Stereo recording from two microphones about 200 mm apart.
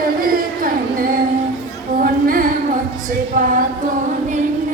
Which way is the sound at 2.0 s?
45° right (ahead or behind).